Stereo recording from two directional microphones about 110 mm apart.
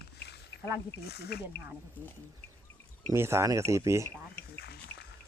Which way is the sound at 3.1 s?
25° right (ahead or behind).